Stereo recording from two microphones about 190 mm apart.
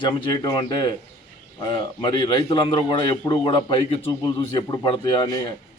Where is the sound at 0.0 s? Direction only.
25° left (ahead or behind).